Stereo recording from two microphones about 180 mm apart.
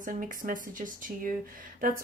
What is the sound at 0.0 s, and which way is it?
Speech, 50° right (ahead or behind).